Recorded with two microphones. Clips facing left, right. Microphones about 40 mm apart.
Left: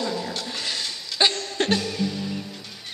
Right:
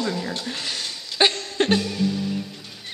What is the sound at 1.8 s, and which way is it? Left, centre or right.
Music, centre.